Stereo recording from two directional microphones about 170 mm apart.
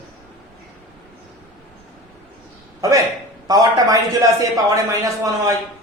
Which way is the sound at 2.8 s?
20° right (ahead or behind).